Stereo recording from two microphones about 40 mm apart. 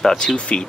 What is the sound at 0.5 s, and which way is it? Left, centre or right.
Speech, left.